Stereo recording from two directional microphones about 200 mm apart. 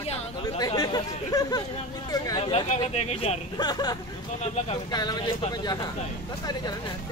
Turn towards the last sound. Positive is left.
turn(degrees=20)  # may be behind; listen again after turning